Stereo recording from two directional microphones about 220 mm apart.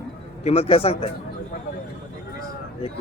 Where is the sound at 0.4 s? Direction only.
25° left (ahead or behind).